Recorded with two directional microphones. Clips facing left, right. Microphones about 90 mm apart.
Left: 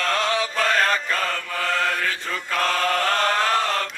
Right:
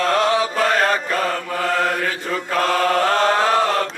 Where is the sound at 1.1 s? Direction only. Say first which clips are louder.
Right 4 dB; 20° right (ahead or behind).